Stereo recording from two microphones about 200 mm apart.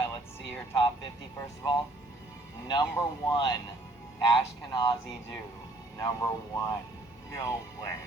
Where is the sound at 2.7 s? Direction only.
20° left (ahead or behind).